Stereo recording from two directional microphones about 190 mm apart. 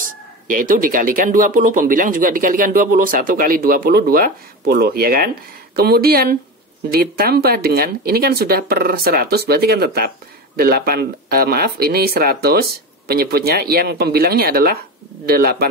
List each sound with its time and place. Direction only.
0.5 s speech: 45° right (ahead or behind)